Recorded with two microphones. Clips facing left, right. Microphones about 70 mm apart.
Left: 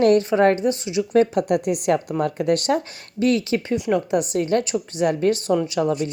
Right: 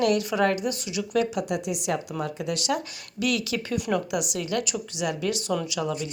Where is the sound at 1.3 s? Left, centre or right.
Left.